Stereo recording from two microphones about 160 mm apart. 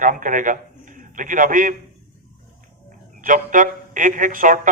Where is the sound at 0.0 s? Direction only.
55° right (ahead or behind).